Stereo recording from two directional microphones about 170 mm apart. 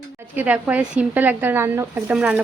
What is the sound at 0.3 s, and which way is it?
Speech, 10° right (ahead or behind).